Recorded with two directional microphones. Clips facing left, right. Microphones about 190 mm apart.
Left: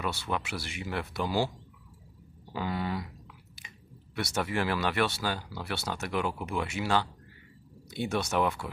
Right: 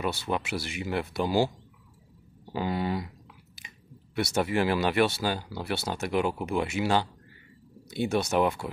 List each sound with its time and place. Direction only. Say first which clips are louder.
0.0 s speech: right 3 dB; 15° right (ahead or behind)
2.5 s speech: right 4 dB; 20° right (ahead or behind)
4.1 s speech: right 5 dB; 20° right (ahead or behind)